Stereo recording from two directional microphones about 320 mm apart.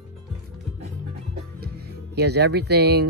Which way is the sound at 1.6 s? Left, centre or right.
Right.